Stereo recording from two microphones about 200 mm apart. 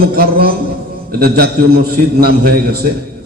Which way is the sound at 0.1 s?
50° right (ahead or behind).